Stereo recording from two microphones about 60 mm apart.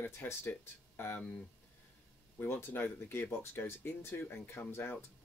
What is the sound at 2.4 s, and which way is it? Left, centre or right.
Speech, left.